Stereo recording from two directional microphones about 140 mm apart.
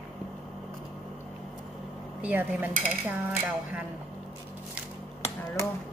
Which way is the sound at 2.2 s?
10° right (ahead or behind).